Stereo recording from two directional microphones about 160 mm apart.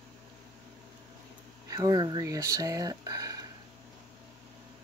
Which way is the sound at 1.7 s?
25° right (ahead or behind).